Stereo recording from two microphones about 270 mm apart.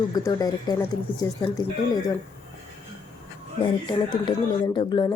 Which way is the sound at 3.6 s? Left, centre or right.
Centre.